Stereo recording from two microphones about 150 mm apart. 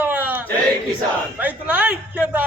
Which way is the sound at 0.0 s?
10° right (ahead or behind).